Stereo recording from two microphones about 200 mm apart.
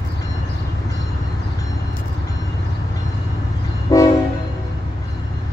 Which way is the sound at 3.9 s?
15° left (ahead or behind).